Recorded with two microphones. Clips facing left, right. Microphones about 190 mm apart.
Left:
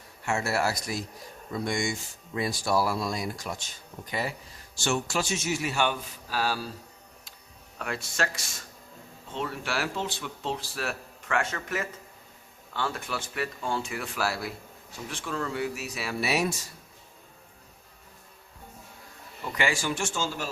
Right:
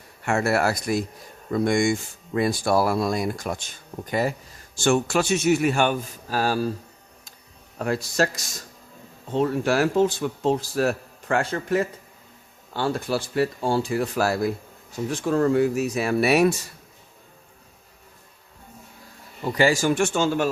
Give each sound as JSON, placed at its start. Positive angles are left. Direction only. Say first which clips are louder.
{"t": 0.3, "sound": "speech", "louder": "right 6 dB", "side_deg": -55}
{"t": 7.8, "sound": "speech", "louder": "right 8 dB", "side_deg": -40}
{"t": 19.4, "sound": "speech", "louder": "right 9 dB", "side_deg": -35}